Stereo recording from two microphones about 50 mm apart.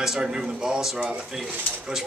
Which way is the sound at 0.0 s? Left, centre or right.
Centre.